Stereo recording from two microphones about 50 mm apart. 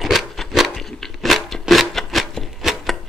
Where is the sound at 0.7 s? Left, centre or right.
Centre.